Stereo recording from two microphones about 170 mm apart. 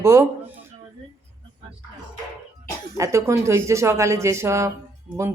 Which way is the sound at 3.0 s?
15° right (ahead or behind).